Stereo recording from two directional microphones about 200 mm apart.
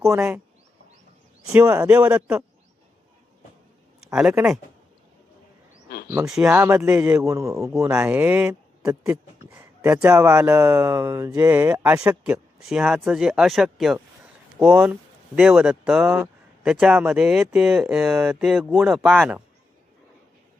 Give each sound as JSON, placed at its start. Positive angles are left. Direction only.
{"t": 0.1, "sound": "speech", "side_deg": -10}
{"t": 1.5, "sound": "speech", "side_deg": -10}
{"t": 4.0, "sound": "speech", "side_deg": -5}
{"t": 5.9, "sound": "a sound", "side_deg": 55}
{"t": 6.1, "sound": "speech", "side_deg": -5}